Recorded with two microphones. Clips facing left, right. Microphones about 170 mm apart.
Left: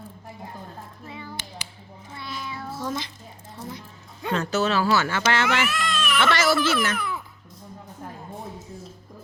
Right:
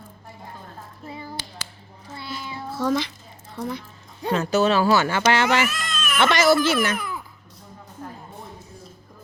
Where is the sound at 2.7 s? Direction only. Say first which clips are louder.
Right 8 dB; 75° right (ahead or behind).